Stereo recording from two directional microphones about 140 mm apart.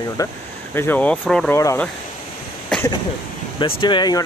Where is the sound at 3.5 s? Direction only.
35° left (ahead or behind).